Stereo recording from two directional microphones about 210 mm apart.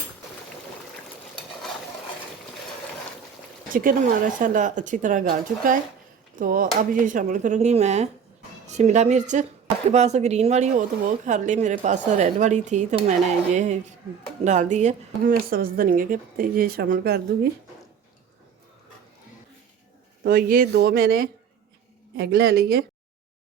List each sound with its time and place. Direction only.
3.7 s speech: 40° right (ahead or behind)
20.2 s speech: 45° right (ahead or behind)